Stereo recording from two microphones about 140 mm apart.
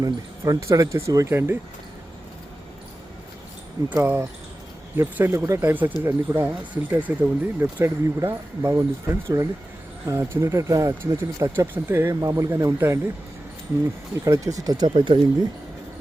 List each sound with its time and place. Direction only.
0.0 s speech: 25° right (ahead or behind)
3.9 s speech: 15° right (ahead or behind)
14.3 s speech: 25° right (ahead or behind)